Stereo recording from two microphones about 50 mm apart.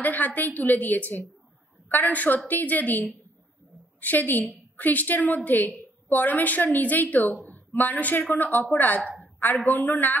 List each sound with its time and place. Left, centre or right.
0.0 s a woman's voice: left
9.2 s a sound: left
9.7 s a woman's voice: left